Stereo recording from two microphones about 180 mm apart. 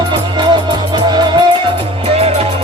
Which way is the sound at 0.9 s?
25° right (ahead or behind).